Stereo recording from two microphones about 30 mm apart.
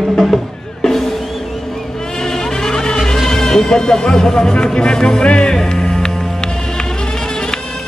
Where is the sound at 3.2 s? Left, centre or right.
Centre.